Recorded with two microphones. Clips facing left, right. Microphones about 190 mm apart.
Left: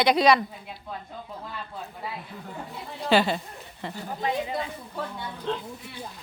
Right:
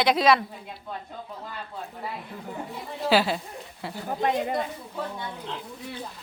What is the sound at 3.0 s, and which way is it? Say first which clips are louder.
A woman's voice: even; 5° right (ahead or behind).